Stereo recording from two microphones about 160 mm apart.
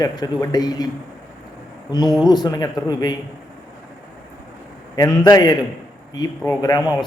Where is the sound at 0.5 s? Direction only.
25° left (ahead or behind).